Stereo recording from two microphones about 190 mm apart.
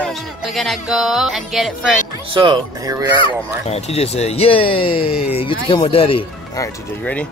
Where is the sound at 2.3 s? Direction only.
25° right (ahead or behind).